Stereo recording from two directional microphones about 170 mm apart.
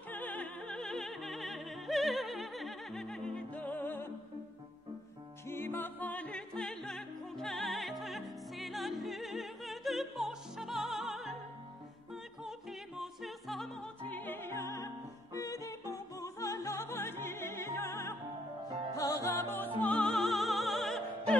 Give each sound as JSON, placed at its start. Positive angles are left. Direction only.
{"t": 0.1, "sound": "opera", "side_deg": 10}
{"t": 5.5, "sound": "music", "side_deg": 10}
{"t": 12.4, "sound": "music", "side_deg": 0}
{"t": 19.8, "sound": "opera", "side_deg": 5}